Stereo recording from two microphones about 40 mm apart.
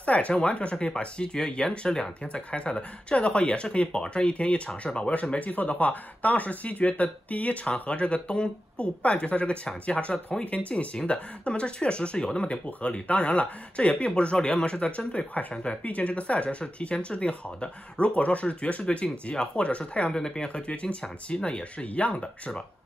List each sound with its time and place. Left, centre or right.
0.0 s speech: left
12.6 s speech: left
15.5 s speech: left
15.8 s speech: left
20.2 s speech: centre
20.4 s speech: left
22.1 s speech: centre